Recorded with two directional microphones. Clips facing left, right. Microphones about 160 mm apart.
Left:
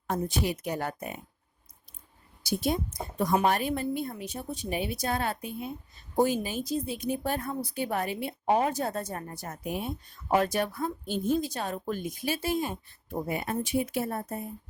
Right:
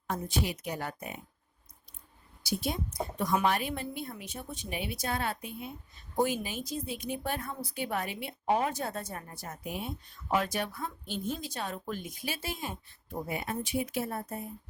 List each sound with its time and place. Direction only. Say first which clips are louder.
0.1 s speech: left 4 dB; 45° left (ahead or behind)
3.2 s a woman's voice: left 4 dB; 40° left (ahead or behind)